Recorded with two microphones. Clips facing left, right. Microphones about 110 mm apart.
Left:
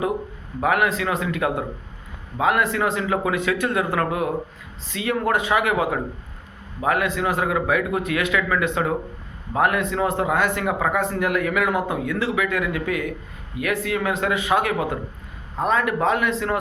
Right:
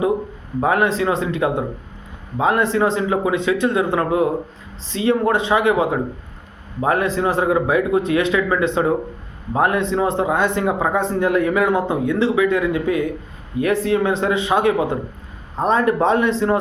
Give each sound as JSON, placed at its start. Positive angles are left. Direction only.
{"t": 0.6, "sound": "a man's voice", "side_deg": -30}